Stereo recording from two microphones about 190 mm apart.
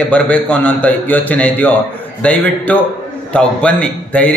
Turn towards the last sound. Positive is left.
turn(degrees=5)  # may be behind; listen again after turning